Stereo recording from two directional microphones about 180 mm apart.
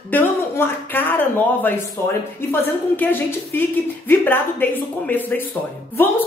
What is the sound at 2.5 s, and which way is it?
A woman's voice, 10° left (ahead or behind).